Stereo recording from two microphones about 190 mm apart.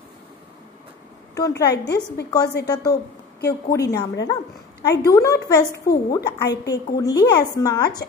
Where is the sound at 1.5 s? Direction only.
60° left (ahead or behind).